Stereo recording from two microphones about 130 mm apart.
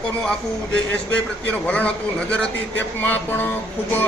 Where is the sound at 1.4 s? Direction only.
10° left (ahead or behind).